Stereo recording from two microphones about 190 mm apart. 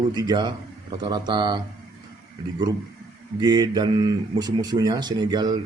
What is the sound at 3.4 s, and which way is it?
A man's voice, 20° right (ahead or behind).